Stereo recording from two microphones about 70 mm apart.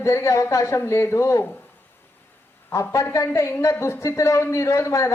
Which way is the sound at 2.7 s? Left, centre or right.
Left.